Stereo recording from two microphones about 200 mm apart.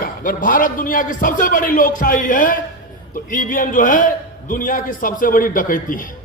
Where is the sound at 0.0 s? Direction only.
45° left (ahead or behind).